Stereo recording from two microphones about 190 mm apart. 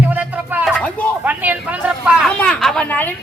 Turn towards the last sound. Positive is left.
turn(degrees=10)  # may be behind; listen again after turning